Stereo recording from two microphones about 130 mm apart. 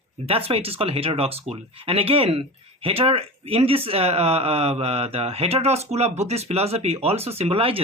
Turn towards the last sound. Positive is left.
turn(degrees=-45)  # may be behind; listen again after turning